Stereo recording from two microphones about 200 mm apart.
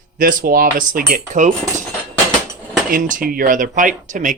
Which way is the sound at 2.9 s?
40° right (ahead or behind).